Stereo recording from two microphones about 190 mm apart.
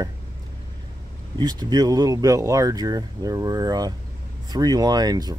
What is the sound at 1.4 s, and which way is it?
Speech, 20° right (ahead or behind).